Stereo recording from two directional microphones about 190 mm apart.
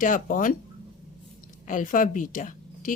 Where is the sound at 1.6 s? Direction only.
45° left (ahead or behind).